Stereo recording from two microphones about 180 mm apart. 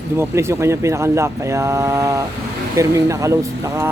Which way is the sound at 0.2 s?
15° right (ahead or behind).